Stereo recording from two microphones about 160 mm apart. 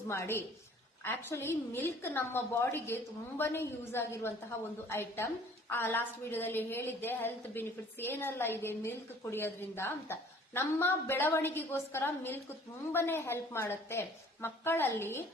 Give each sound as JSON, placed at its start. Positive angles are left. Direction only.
{"t": 0.1, "sound": "a woman's voice", "side_deg": 15}